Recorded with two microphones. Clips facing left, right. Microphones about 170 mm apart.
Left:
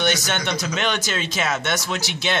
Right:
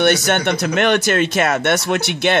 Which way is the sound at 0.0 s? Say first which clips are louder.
Right 7 dB; 60° right (ahead or behind).